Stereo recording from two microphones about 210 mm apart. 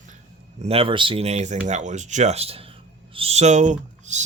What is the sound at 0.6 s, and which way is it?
Speech, 25° right (ahead or behind).